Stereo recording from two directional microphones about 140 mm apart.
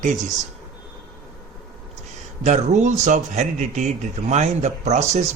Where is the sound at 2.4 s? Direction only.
55° right (ahead or behind).